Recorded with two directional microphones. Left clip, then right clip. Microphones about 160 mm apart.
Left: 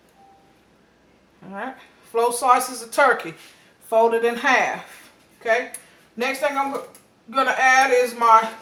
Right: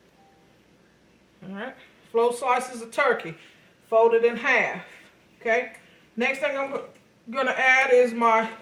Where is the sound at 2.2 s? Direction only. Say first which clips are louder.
Left 4 dB; 15° left (ahead or behind).